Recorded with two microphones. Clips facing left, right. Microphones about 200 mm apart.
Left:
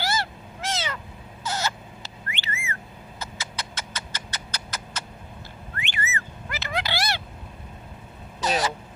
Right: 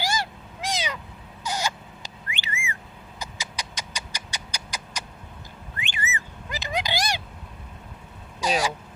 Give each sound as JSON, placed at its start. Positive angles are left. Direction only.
{"t": 0.0, "sound": "cat", "side_deg": -15}
{"t": 1.5, "sound": "a sound", "side_deg": -15}
{"t": 5.7, "sound": "whistling", "side_deg": -15}
{"t": 8.4, "sound": "vehicle", "side_deg": -10}